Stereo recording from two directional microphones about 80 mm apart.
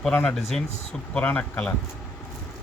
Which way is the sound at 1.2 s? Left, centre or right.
Left.